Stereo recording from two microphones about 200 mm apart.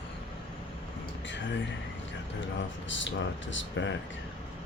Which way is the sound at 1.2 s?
65° left (ahead or behind).